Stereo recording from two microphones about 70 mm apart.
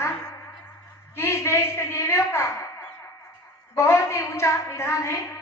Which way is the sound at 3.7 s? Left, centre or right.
Left.